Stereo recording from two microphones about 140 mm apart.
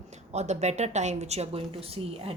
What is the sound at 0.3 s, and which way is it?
A woman's voice, 55° right (ahead or behind).